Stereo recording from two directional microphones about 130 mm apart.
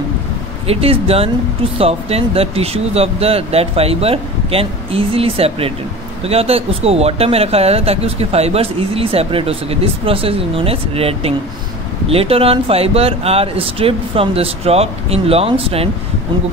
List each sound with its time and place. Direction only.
0.7 s speech: 50° right (ahead or behind)